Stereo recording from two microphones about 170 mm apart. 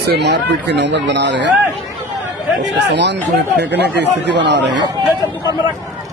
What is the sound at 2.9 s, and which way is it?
Speech, 90° right.